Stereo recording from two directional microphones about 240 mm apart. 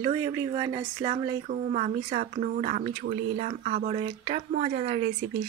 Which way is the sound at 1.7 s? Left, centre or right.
Right.